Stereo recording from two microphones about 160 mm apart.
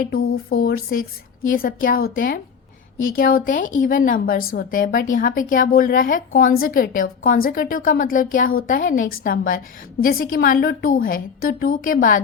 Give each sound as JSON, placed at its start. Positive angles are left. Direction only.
{"t": 0.0, "sound": "a woman's voice", "side_deg": 70}